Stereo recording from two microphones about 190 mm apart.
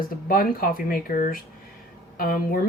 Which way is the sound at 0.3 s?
50° left (ahead or behind).